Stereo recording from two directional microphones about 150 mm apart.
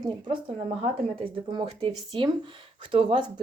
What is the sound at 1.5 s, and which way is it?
Speech, 35° right (ahead or behind).